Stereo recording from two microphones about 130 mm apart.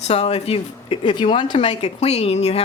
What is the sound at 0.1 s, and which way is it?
A woman's voice, 55° left (ahead or behind).